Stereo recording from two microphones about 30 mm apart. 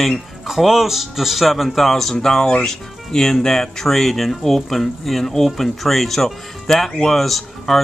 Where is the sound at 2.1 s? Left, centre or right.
Centre.